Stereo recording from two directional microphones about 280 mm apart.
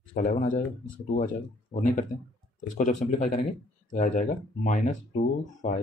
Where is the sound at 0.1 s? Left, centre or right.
Left.